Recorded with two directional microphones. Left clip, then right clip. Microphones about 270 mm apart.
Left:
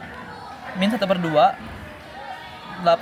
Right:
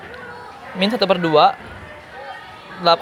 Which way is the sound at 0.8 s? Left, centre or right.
Centre.